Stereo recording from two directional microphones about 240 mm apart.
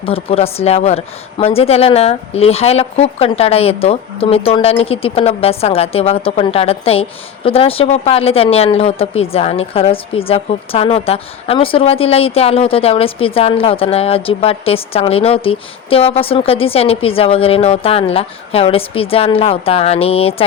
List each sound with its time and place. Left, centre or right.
0.0 s speech: left